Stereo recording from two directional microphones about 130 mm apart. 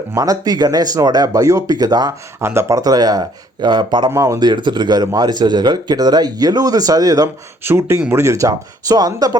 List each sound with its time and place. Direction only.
0.1 s speech: 25° right (ahead or behind)
4.1 s speech: 25° right (ahead or behind)